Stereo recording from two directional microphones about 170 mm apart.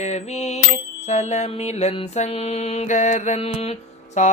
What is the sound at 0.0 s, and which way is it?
Bicycle bell, 40° left (ahead or behind).